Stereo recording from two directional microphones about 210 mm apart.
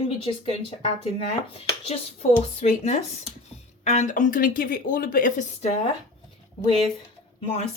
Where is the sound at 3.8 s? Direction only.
35° left (ahead or behind).